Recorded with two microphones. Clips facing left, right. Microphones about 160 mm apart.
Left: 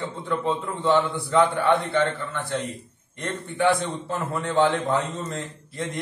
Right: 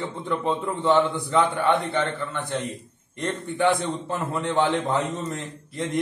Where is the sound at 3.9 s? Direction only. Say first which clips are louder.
Right 1 dB; 20° right (ahead or behind).